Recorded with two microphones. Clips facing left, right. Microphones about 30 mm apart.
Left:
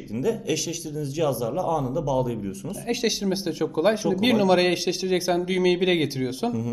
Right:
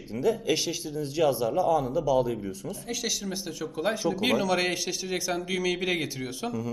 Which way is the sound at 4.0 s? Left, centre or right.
Centre.